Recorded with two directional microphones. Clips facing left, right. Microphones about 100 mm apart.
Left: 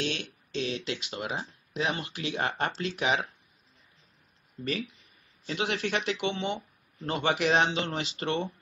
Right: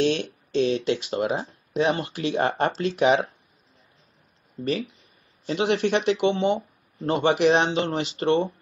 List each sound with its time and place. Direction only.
0.0 s speech: 35° right (ahead or behind)
5.5 s speech: 30° right (ahead or behind)